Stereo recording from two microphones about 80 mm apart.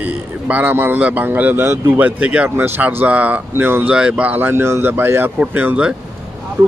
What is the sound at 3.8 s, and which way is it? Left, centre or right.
Speech, centre.